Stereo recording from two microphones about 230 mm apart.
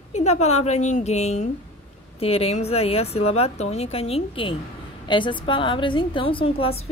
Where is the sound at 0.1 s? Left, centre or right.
Left.